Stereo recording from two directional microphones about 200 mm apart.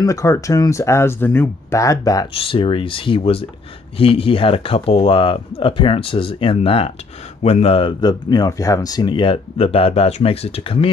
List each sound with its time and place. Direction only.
0.0 s speech: 15° left (ahead or behind)